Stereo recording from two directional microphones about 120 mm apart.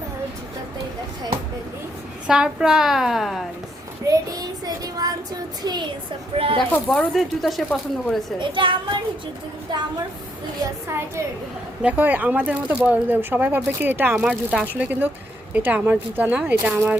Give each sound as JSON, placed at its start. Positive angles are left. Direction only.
{"t": 2.2, "sound": "a woman's voice", "side_deg": -5}
{"t": 4.0, "sound": "child singing", "side_deg": -30}
{"t": 5.6, "sound": "speech", "side_deg": -40}
{"t": 6.3, "sound": "speech", "side_deg": -50}
{"t": 6.8, "sound": "a woman's voice", "side_deg": 0}
{"t": 8.4, "sound": "speech", "side_deg": -45}
{"t": 10.8, "sound": "a woman's voice", "side_deg": -20}